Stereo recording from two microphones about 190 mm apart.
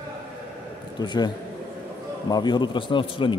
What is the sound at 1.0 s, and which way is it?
Speech, 20° left (ahead or behind).